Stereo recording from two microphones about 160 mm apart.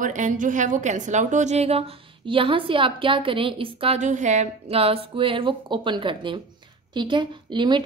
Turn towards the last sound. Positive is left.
turn(degrees=-30)  # may be behind; listen again after turning